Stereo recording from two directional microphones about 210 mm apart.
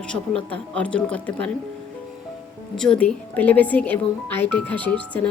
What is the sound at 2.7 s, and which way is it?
Speech, 5° left (ahead or behind).